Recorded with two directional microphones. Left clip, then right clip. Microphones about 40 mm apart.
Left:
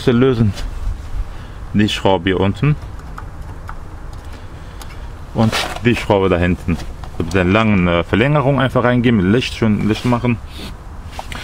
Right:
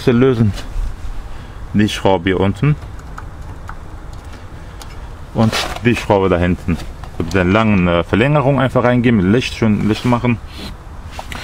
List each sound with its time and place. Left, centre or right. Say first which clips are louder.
0.0 s speech: right 1 dB; right
1.8 s speech: right 1 dB; right
5.3 s speech: right 1 dB; centre
5.9 s speech: right 1 dB; centre
7.7 s speech: right 1 dB; right
9.7 s speech: right 1 dB; right
9.9 s speech: right 1 dB; right
10.2 s speech: right 1 dB; right
11.1 s walk: even; right